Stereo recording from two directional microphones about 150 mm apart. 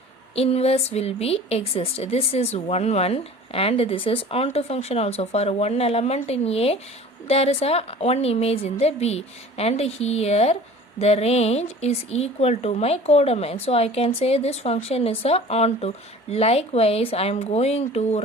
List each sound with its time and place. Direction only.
0.3 s a woman's voice: 45° left (ahead or behind)